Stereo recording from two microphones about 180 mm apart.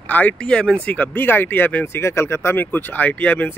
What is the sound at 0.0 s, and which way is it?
Speech, 10° left (ahead or behind).